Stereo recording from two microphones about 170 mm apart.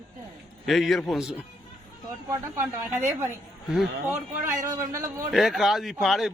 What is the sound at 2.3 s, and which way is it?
A man's voice, 15° right (ahead or behind).